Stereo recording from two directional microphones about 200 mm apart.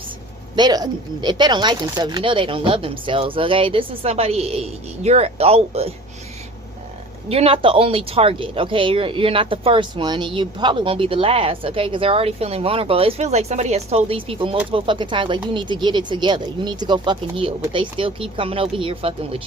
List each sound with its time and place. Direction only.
0.5 s speech: 20° right (ahead or behind)
7.3 s speech: 30° right (ahead or behind)